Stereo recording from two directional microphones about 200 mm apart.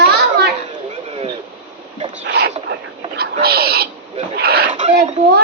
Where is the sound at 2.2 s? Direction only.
55° right (ahead or behind).